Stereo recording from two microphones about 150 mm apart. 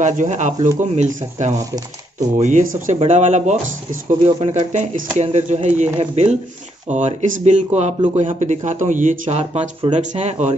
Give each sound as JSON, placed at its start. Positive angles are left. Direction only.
{"t": 0.0, "sound": "speech", "side_deg": -55}
{"t": 4.2, "sound": "speech", "side_deg": -40}